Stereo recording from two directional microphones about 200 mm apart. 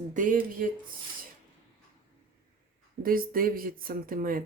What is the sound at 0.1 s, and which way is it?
Speech, 40° right (ahead or behind).